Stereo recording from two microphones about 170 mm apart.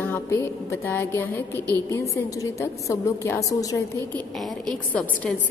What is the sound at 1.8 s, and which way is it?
Music, 20° left (ahead or behind).